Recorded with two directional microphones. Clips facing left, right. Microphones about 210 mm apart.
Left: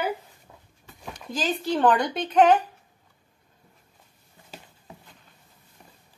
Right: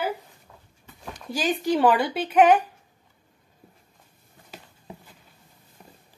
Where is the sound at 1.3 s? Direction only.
10° right (ahead or behind).